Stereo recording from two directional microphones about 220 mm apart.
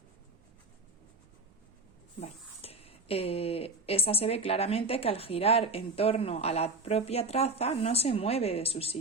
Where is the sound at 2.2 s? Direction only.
25° left (ahead or behind).